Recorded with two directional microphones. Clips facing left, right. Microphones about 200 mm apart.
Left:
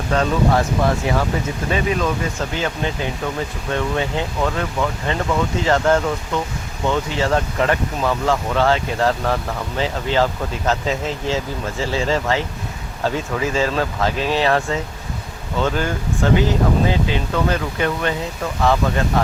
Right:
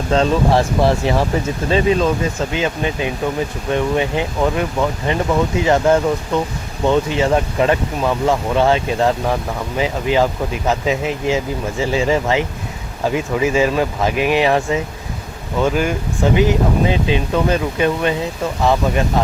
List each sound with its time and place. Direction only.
0.1 s speech: 30° right (ahead or behind)